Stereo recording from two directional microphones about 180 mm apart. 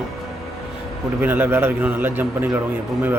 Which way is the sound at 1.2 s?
10° right (ahead or behind).